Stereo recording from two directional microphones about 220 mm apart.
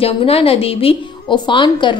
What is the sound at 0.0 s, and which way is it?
A woman's voice, 25° left (ahead or behind).